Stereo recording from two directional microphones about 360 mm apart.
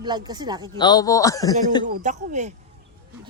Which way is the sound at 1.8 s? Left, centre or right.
Right.